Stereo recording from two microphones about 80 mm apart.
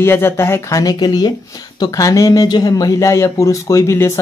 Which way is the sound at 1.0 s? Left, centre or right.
Left.